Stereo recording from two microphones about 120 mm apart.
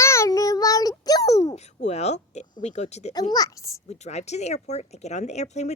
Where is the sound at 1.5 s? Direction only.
65° left (ahead or behind).